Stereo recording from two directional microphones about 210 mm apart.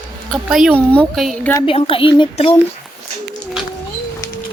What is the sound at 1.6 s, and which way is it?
Speech, 25° left (ahead or behind).